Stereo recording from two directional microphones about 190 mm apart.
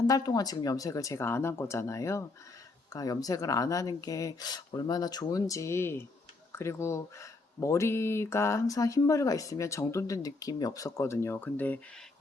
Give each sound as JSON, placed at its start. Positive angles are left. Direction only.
{"t": 0.1, "sound": "speech", "side_deg": 20}